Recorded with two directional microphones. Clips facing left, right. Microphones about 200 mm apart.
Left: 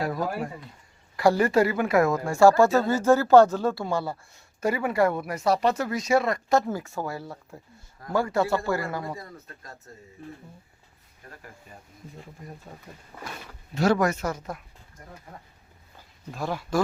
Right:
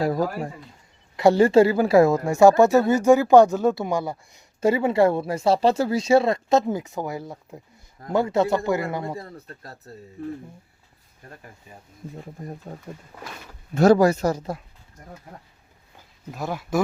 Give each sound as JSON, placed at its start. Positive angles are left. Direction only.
{"t": 0.0, "sound": "a woman's voice", "side_deg": -30}
{"t": 12.7, "sound": "speech", "side_deg": -45}
{"t": 16.3, "sound": "speech", "side_deg": -5}